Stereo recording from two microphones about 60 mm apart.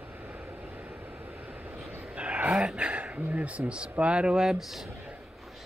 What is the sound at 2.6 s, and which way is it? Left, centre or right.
Speech, centre.